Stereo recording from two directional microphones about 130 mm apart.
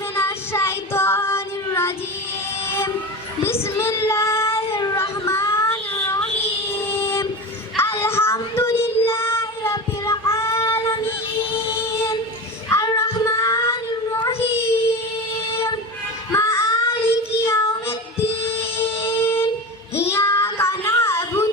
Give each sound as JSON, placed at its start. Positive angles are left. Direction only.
{"t": 0.2, "sound": "child singing", "side_deg": 20}
{"t": 3.4, "sound": "child singing", "side_deg": 20}
{"t": 4.9, "sound": "a sound", "side_deg": 20}
{"t": 7.8, "sound": "child singing", "side_deg": 20}
{"t": 11.9, "sound": "music", "side_deg": 20}
{"t": 12.7, "sound": "child singing", "side_deg": 25}
{"t": 16.3, "sound": "child singing", "side_deg": 20}